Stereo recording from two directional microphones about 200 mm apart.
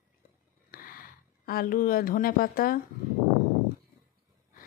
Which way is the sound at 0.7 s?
45° left (ahead or behind).